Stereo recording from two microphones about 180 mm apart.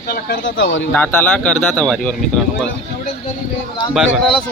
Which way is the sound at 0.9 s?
10° left (ahead or behind).